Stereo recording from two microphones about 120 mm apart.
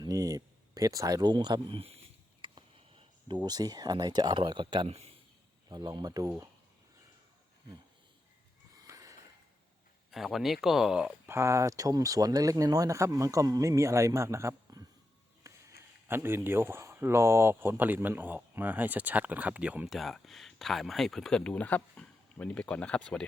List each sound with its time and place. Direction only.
0.0 s speech: 30° right (ahead or behind); by 2.0 s 50° right (ahead or behind)
2.4 s a sound: 40° right (ahead or behind)
3.4 s speech: 35° right (ahead or behind)
8.9 s a sound: 25° right (ahead or behind)
10.1 s speech: centre (ahead or behind)
11.3 s speech: 20° right (ahead or behind); by 23.2 s 10° left (ahead or behind)